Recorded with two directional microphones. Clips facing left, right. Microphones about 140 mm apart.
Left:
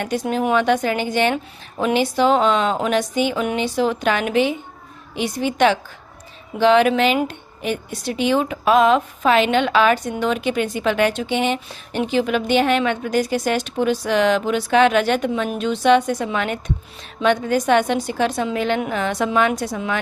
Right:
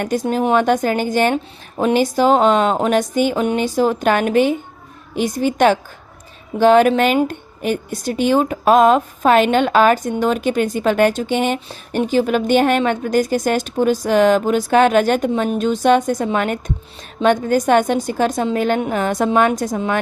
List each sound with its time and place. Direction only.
0.0 s a woman's voice: 45° right (ahead or behind)